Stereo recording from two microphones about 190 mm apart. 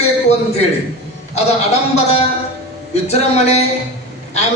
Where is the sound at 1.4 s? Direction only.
35° left (ahead or behind).